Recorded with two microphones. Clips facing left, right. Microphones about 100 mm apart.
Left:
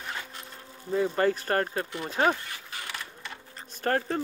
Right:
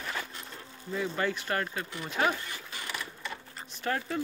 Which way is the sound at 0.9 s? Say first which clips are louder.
Left 6 dB; 40° left (ahead or behind).